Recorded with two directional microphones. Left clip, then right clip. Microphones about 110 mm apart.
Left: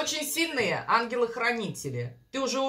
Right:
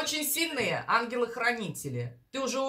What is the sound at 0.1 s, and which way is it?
A woman's voice, 25° left (ahead or behind).